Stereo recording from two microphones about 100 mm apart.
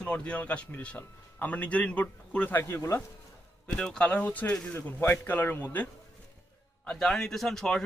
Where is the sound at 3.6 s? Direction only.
5° left (ahead or behind).